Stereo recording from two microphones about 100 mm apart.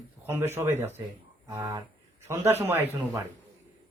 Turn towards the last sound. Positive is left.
turn(degrees=-20)  # may be behind; listen again after turning